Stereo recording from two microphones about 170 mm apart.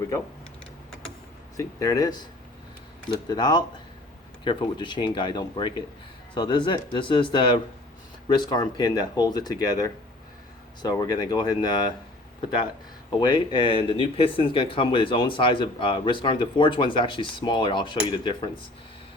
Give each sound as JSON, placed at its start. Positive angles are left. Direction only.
{"t": 1.5, "sound": "speech", "side_deg": 20}
{"t": 3.2, "sound": "speech", "side_deg": 25}
{"t": 13.1, "sound": "speech", "side_deg": 25}